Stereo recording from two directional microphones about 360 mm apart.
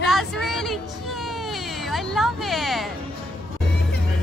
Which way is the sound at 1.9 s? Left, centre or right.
Centre.